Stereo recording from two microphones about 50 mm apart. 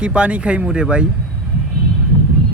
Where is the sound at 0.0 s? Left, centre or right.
Right.